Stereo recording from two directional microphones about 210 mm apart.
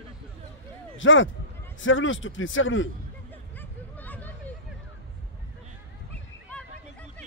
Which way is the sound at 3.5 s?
10° left (ahead or behind).